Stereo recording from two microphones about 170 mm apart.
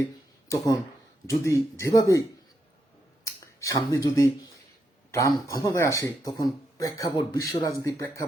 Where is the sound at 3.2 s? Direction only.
20° left (ahead or behind).